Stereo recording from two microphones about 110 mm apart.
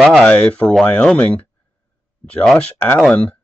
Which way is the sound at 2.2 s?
5° left (ahead or behind).